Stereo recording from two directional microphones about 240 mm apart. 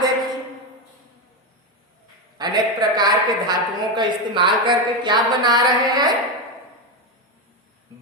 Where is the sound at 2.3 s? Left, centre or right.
Centre.